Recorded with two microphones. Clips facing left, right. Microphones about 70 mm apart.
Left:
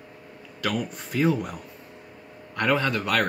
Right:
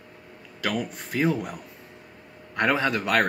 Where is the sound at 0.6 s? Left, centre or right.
Centre.